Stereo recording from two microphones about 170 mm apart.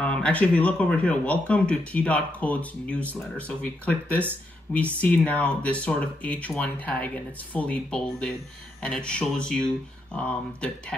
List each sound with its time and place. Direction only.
0.0 s speech: 5° left (ahead or behind)